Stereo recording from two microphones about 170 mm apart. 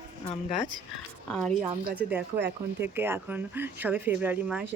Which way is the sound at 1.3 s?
5° left (ahead or behind).